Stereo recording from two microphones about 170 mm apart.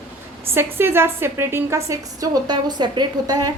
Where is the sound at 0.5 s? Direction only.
15° right (ahead or behind).